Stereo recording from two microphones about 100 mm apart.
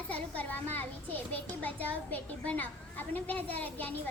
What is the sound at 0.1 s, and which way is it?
A child's voice, 15° left (ahead or behind).